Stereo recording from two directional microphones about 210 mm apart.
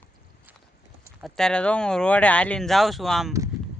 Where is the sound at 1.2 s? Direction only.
Centre (ahead or behind).